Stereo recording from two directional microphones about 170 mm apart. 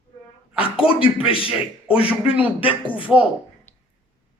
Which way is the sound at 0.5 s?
30° left (ahead or behind).